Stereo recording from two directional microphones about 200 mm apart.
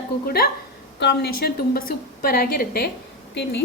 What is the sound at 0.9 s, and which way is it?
A woman's voice, 55° left (ahead or behind).